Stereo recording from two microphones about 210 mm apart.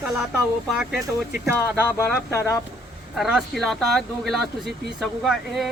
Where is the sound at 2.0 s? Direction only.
10° left (ahead or behind).